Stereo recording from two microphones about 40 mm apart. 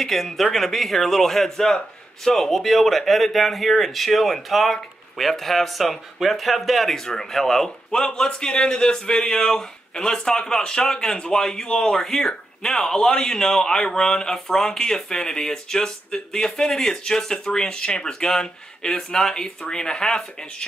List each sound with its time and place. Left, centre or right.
0.0 s speech: centre
7.9 s speech: centre